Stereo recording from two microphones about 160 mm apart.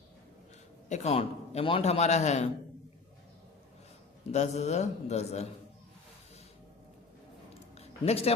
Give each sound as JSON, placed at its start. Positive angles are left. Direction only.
{"t": 0.9, "sound": "a man's voice", "side_deg": 45}
{"t": 4.3, "sound": "a man's voice", "side_deg": 45}
{"t": 7.8, "sound": "a sound", "side_deg": 40}